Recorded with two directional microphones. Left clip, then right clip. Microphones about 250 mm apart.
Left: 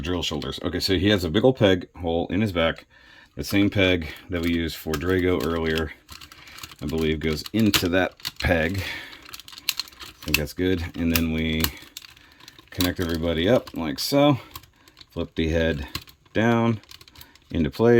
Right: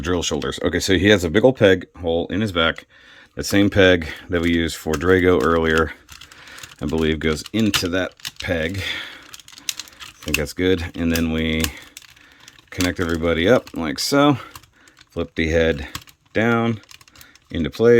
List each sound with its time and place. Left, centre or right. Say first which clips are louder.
0.0 s speech: right 6 dB; centre
10.2 s speech: right 4 dB; centre
13.2 s speech: right 5 dB; centre